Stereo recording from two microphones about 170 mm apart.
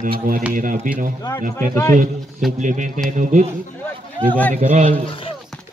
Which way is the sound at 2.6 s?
45° right (ahead or behind).